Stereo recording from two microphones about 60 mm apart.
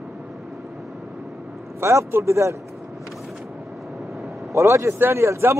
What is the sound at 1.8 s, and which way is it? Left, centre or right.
Speech, right.